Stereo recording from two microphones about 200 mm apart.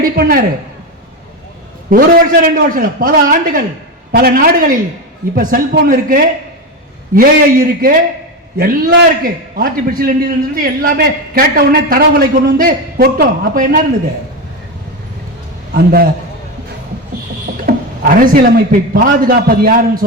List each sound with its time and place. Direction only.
0.0 s a man's voice: 45° right (ahead or behind)
1.9 s a man's voice: 45° right (ahead or behind)
15.7 s a man's voice: 50° right (ahead or behind)
17.7 s a man's voice: 45° right (ahead or behind)